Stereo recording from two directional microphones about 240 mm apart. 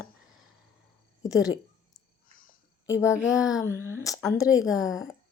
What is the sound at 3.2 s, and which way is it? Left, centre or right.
Speech, centre.